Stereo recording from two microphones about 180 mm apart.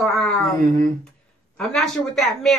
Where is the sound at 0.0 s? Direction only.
Centre (ahead or behind).